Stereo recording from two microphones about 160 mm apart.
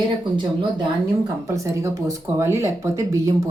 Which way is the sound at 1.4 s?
20° right (ahead or behind).